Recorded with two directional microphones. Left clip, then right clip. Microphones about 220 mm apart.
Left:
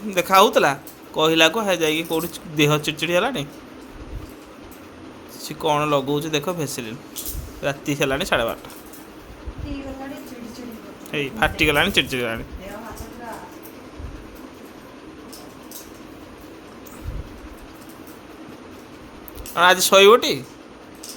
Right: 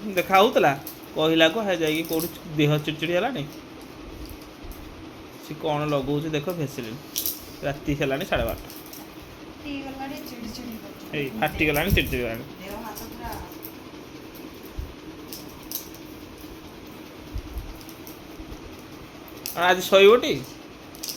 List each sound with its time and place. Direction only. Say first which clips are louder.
0.1 s speech: left 4 dB; 15° left (ahead or behind)
5.6 s speech: left 5 dB; 20° left (ahead or behind)
11.1 s speech: left 5 dB; 20° left (ahead or behind)
19.5 s speech: left 4 dB; 15° left (ahead or behind)